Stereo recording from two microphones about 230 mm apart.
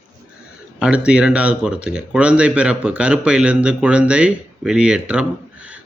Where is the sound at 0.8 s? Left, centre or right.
Centre.